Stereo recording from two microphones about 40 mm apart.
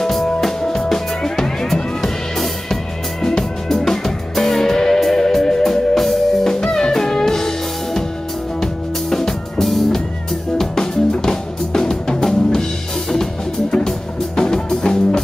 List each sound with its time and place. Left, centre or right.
0.0 s music: centre
9.1 s music: centre